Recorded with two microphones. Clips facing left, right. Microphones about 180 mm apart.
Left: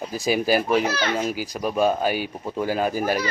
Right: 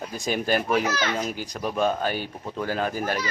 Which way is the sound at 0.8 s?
30° left (ahead or behind).